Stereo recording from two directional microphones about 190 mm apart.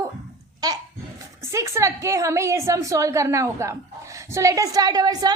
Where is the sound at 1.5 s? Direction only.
15° right (ahead or behind).